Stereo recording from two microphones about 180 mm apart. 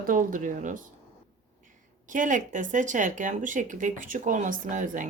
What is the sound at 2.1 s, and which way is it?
Speech, 45° right (ahead or behind).